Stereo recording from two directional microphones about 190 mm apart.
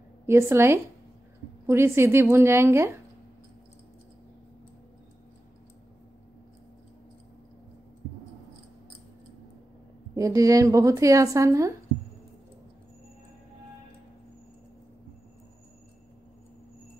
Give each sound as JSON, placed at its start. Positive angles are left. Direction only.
{"t": 0.3, "sound": "a woman's voice", "side_deg": -15}
{"t": 10.1, "sound": "a woman's voice", "side_deg": -15}